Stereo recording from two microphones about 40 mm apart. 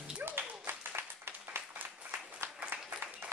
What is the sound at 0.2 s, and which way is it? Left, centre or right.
Applause, right.